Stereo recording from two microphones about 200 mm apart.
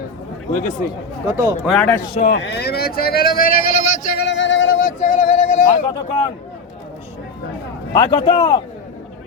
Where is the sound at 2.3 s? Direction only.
60° left (ahead or behind).